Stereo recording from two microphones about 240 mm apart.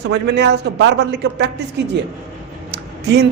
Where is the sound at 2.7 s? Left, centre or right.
Right.